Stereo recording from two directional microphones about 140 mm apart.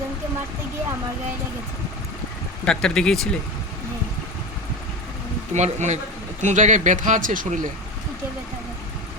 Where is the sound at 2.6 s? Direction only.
5° left (ahead or behind).